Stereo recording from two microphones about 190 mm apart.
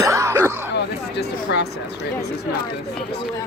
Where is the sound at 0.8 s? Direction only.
65° left (ahead or behind).